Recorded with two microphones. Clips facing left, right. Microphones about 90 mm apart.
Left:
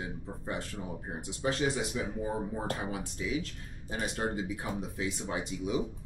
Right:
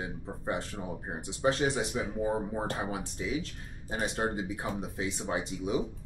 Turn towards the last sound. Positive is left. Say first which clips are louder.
# right 2 dB
turn(degrees=-30)  # may be behind; listen again after turning